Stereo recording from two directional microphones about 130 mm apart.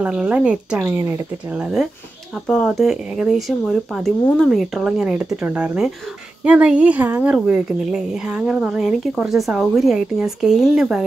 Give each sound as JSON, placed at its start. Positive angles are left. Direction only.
{"t": 0.0, "sound": "a woman's voice", "side_deg": -10}